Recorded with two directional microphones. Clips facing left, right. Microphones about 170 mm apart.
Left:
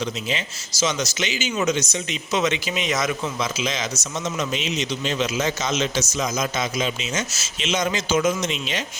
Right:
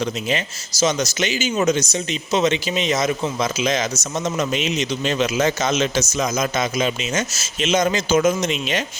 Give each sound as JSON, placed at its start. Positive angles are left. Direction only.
{"t": 0.0, "sound": "speech", "side_deg": -50}
{"t": 3.4, "sound": "a man's voice", "side_deg": -50}